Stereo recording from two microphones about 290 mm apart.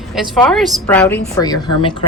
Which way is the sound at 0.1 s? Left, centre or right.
Centre.